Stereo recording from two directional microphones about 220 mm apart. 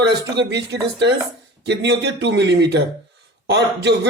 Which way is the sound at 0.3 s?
50° right (ahead or behind).